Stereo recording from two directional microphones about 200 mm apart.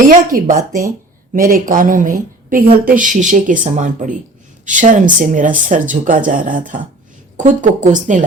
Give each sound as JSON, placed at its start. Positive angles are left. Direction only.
{"t": 0.1, "sound": "a woman's voice", "side_deg": -45}